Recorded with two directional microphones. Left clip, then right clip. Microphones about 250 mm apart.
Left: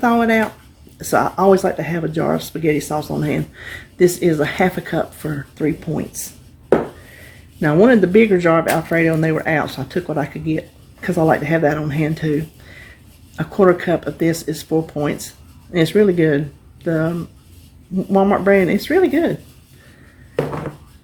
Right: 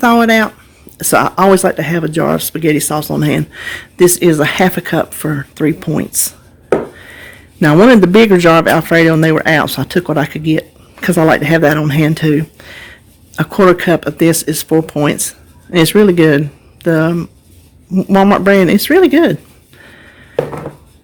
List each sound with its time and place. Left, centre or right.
0.0 s speech: right
7.6 s speech: right